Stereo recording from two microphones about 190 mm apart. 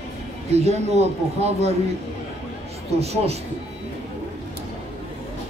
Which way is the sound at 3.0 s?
35° right (ahead or behind).